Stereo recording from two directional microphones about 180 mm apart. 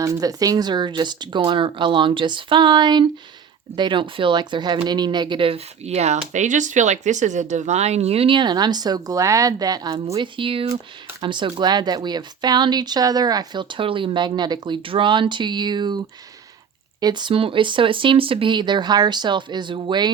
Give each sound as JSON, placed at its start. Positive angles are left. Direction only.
{"t": 0.0, "sound": "speech", "side_deg": -20}
{"t": 17.0, "sound": "speech", "side_deg": -25}